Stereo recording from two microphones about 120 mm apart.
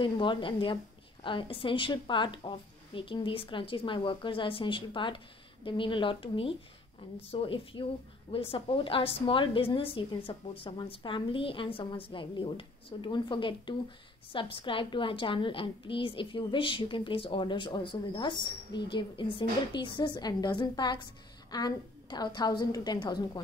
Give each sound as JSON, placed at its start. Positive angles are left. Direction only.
{"t": 0.0, "sound": "a woman's voice", "side_deg": 45}